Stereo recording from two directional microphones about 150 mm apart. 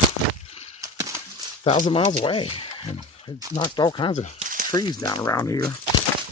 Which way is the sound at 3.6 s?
30° left (ahead or behind).